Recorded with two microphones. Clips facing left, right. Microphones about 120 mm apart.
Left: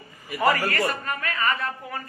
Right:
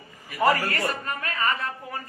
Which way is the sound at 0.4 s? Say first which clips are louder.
Even; 35° right (ahead or behind).